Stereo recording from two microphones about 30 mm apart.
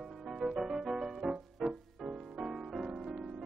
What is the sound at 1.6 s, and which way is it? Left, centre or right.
Music, right.